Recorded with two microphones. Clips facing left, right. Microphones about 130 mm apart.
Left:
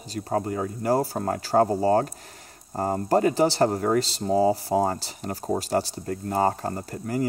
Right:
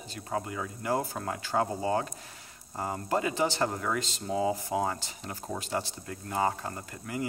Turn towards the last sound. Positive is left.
turn(degrees=40)  # may be behind; listen again after turning